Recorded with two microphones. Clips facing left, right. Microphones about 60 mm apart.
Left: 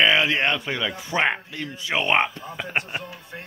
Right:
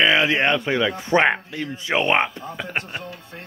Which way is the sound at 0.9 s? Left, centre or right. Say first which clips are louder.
Right 7 dB; right.